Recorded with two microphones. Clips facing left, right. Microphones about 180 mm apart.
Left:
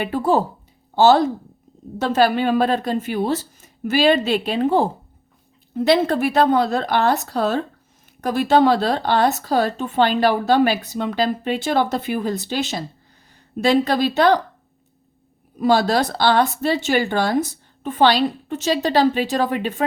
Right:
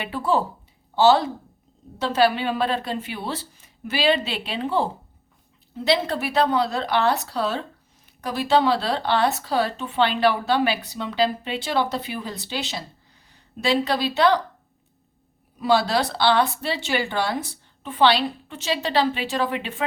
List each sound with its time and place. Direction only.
0.0 s speech: 45° left (ahead or behind)
15.5 s speech: 45° left (ahead or behind)